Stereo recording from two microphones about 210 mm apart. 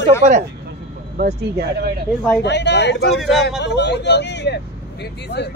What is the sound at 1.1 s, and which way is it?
Speech, 45° right (ahead or behind).